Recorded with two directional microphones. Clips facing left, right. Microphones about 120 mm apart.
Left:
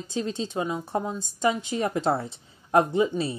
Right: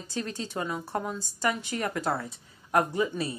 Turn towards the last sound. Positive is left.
turn(degrees=25)  # may be behind; listen again after turning